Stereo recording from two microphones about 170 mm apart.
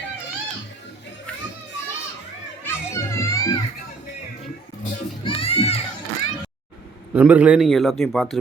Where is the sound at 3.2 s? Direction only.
20° left (ahead or behind).